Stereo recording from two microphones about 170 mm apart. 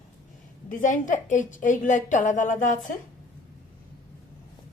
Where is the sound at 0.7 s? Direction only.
50° left (ahead or behind).